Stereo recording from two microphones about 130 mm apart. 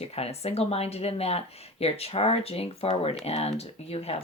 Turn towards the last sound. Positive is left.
turn(degrees=50)  # may be behind; listen again after turning